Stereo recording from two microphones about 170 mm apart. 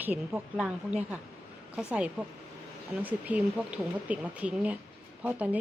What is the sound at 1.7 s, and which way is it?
A woman's voice, 5° right (ahead or behind).